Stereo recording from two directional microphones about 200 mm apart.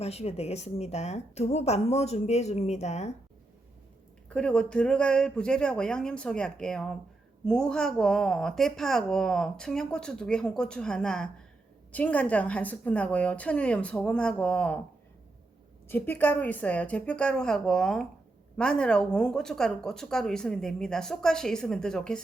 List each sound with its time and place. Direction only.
0.0 s speech: 30° left (ahead or behind)
4.3 s a woman's voice: 5° left (ahead or behind)
15.9 s a woman's voice: 10° left (ahead or behind)